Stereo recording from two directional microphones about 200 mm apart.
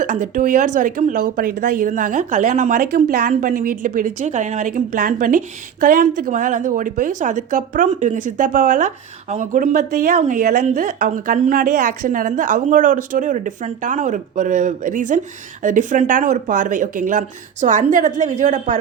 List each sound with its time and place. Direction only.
0.0 s speech: 40° right (ahead or behind)